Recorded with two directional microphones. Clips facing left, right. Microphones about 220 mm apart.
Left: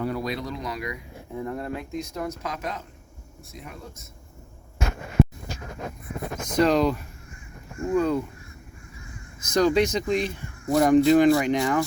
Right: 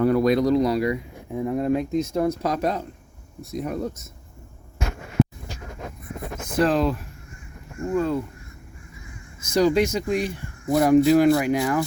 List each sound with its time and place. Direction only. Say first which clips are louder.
0.0 s speech: right 10 dB; 55° right (ahead or behind); by 0.9 s 35° right (ahead or behind)
1.3 s speech: right 8 dB; 15° right (ahead or behind); by 4.1 s 40° right (ahead or behind)
5.2 s a sound: right 1 dB; centre (ahead or behind)
6.6 s speech: even; 5° right (ahead or behind)
9.5 s speech: right 1 dB; 10° right (ahead or behind)